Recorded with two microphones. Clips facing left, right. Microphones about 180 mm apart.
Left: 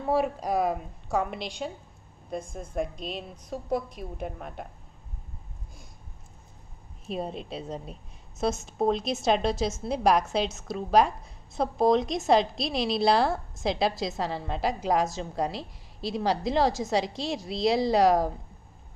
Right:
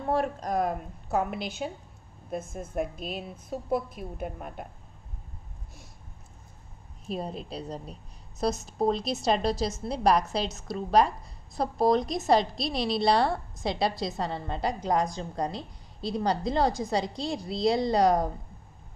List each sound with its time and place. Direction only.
0.0 s a woman's voice: 5° left (ahead or behind)
7.1 s a woman's voice: centre (ahead or behind)